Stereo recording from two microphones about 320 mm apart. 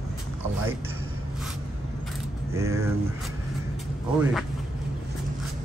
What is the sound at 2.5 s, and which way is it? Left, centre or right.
Speech, centre.